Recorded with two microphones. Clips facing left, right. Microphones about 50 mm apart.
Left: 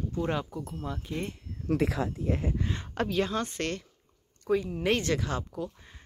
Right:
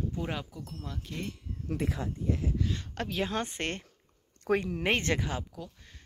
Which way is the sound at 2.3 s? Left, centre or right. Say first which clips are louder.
Left 2 dB; left.